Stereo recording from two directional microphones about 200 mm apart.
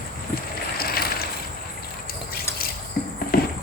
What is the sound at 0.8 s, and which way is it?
Vehicle, 50° left (ahead or behind).